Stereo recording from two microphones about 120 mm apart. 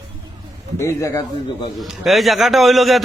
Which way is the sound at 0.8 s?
25° left (ahead or behind).